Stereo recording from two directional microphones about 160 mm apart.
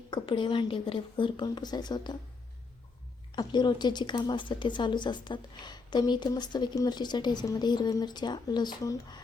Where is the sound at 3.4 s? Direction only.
30° left (ahead or behind).